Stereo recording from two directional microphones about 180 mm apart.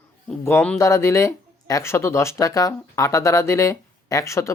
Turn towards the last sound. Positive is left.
turn(degrees=15)  # may be behind; listen again after turning